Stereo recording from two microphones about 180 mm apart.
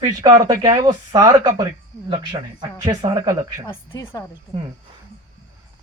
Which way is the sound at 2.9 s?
20° right (ahead or behind).